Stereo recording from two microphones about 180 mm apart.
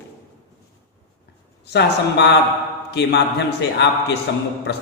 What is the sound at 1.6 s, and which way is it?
A man's voice, 70° left (ahead or behind).